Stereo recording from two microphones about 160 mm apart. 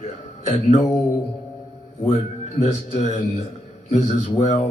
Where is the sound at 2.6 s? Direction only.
45° left (ahead or behind).